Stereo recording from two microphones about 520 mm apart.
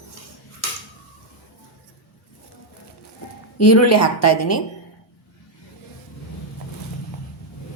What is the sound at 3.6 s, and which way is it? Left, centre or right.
A woman's voice, left.